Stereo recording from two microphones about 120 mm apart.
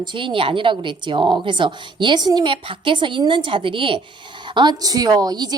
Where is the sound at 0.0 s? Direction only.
45° right (ahead or behind).